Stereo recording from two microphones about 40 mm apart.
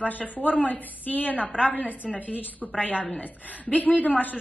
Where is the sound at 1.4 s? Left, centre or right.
Right.